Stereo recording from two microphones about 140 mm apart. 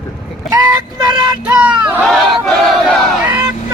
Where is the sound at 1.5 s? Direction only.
10° right (ahead or behind).